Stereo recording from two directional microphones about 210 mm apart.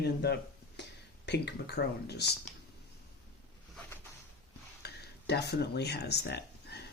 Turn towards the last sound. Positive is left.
turn(degrees=50)  # may be behind; listen again after turning